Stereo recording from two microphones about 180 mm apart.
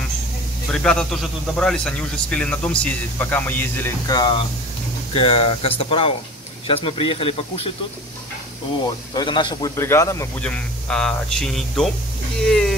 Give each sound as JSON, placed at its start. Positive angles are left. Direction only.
{"t": 0.7, "sound": "speech", "side_deg": 5}
{"t": 4.1, "sound": "speech", "side_deg": 25}
{"t": 9.1, "sound": "speech", "side_deg": 25}
{"t": 12.4, "sound": "a sound", "side_deg": 5}